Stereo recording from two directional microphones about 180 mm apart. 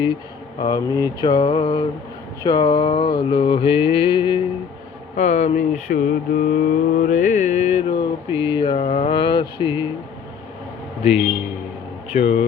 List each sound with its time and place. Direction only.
0.6 s mantra: 20° left (ahead or behind)
5.1 s mantra: 40° left (ahead or behind)
12.1 s speech: 35° left (ahead or behind)